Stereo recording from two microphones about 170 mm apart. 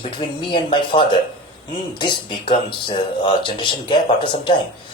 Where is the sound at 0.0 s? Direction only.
30° left (ahead or behind).